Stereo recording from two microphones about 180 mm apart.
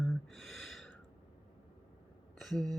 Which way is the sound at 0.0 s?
Centre (ahead or behind).